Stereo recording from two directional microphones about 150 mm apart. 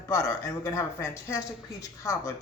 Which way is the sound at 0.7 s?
20° left (ahead or behind).